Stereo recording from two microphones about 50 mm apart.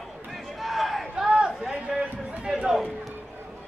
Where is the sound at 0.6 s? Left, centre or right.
Centre.